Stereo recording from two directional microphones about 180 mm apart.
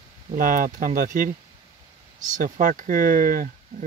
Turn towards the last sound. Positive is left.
turn(degrees=-50)  # may be behind; listen again after turning